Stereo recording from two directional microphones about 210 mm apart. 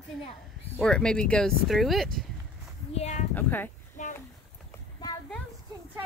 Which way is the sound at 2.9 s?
30° left (ahead or behind).